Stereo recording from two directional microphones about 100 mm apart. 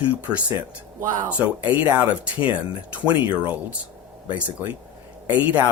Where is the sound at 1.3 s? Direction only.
15° right (ahead or behind).